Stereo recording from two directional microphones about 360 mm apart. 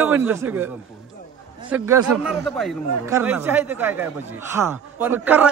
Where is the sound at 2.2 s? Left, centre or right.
Centre.